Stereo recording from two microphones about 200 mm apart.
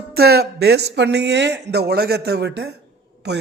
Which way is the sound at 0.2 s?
50° right (ahead or behind).